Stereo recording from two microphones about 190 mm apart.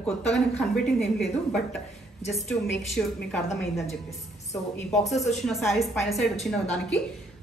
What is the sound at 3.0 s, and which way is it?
Speech, centre (ahead or behind).